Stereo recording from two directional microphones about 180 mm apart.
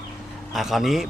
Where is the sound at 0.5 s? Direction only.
Centre (ahead or behind).